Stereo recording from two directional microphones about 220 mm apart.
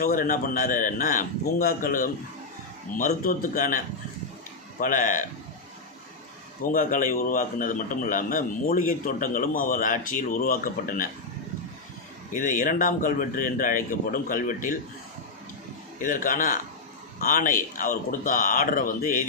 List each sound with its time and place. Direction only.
0.0 s a man's voice: 40° left (ahead or behind)
4.8 s a man's voice: 35° left (ahead or behind)
6.6 s a man's voice: 40° left (ahead or behind)
12.3 s a man's voice: 35° left (ahead or behind)
16.0 s a man's voice: 40° left (ahead or behind)